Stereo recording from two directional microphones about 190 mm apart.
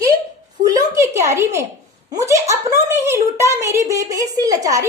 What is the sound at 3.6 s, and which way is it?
A woman's voice, 15° right (ahead or behind).